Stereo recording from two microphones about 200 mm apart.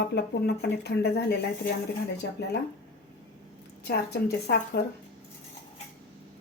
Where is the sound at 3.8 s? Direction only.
55° left (ahead or behind).